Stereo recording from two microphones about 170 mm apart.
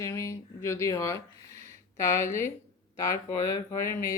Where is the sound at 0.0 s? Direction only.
15° left (ahead or behind).